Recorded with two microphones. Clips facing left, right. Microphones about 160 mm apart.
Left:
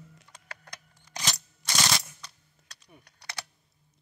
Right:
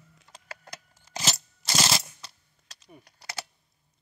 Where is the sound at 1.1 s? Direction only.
30° right (ahead or behind).